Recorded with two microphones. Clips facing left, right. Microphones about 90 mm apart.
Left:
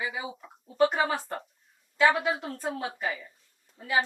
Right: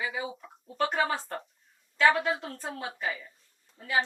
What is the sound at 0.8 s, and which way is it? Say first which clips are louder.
A woman's voice: left 3 dB; 10° left (ahead or behind).